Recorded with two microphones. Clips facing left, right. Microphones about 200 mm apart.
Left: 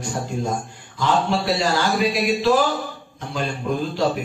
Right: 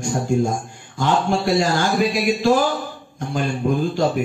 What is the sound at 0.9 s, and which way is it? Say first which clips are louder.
Speech: right 1 dB; 45° right (ahead or behind).